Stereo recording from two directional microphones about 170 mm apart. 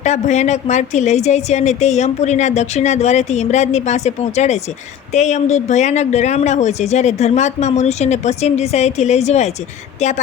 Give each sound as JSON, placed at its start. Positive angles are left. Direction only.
{"t": 0.0, "sound": "a woman's voice", "side_deg": 45}